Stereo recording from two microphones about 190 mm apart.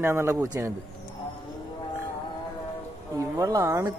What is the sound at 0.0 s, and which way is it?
Speech, 15° right (ahead or behind).